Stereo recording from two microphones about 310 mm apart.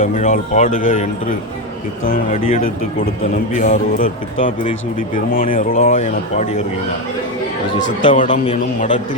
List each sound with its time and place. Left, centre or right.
0.0 s speech: left
2.4 s speech: left
3.5 s speech: left
8.0 s a man's voice: left